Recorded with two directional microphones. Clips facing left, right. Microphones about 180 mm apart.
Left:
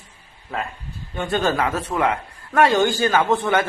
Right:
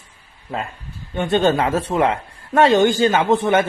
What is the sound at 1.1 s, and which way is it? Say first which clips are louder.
A man's voice: right 4 dB; 25° right (ahead or behind).